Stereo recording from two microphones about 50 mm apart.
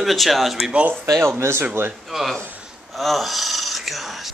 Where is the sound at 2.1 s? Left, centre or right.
Centre.